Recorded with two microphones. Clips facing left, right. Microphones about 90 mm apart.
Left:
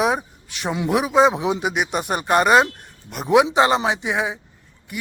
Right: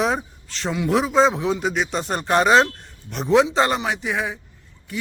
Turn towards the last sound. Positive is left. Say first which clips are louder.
# left 2 dB
turn(degrees=20)  # may be behind; listen again after turning